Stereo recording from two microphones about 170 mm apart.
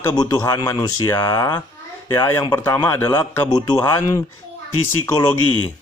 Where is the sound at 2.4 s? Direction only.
25° left (ahead or behind).